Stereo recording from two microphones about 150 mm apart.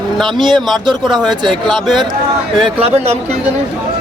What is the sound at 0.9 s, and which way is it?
Speech, 30° right (ahead or behind).